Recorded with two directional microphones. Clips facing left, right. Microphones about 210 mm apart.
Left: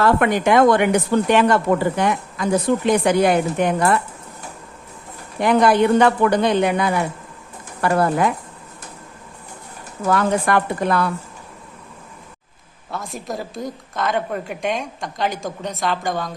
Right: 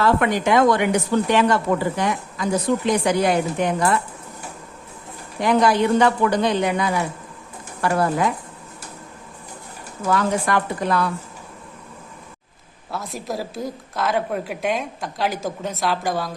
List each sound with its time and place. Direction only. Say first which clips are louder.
0.0 s a woman's voice: left 2 dB; 55° left (ahead or behind)
5.4 s a woman's voice: left 2 dB; 55° left (ahead or behind)
10.1 s a woman's voice: left 2 dB; 55° left (ahead or behind)
12.9 s a woman's voice: even; centre (ahead or behind)